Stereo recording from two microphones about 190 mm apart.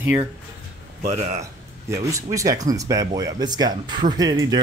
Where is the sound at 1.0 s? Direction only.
35° right (ahead or behind).